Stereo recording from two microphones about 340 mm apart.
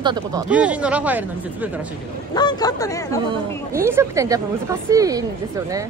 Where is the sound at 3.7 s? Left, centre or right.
Centre.